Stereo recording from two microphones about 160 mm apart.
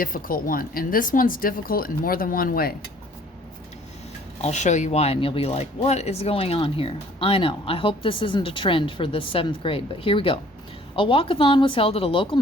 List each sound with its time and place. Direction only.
0.0 s speech: 60° left (ahead or behind)
4.4 s speech: 45° left (ahead or behind)